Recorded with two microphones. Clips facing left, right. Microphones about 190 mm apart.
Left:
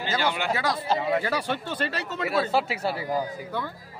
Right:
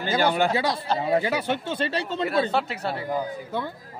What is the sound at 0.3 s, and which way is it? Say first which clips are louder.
Speech: right 4 dB; 35° right (ahead or behind).